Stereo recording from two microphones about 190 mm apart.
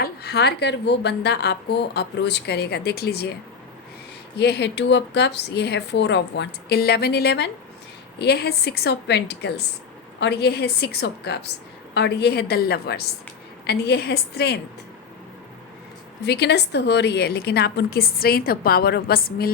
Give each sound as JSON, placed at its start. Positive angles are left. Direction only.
{"t": 0.0, "sound": "speech", "side_deg": 55}
{"t": 4.4, "sound": "speech", "side_deg": 60}
{"t": 16.2, "sound": "speech", "side_deg": 60}